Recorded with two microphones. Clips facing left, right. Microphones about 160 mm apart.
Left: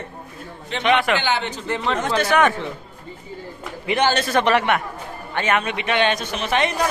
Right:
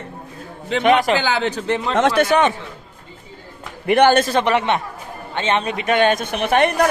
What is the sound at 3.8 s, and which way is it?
Speech, 55° right (ahead or behind).